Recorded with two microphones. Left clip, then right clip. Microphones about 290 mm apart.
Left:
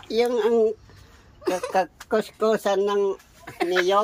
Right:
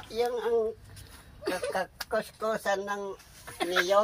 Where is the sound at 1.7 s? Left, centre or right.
Left.